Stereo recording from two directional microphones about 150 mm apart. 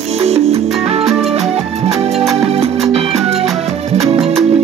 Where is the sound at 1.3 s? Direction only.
45° right (ahead or behind).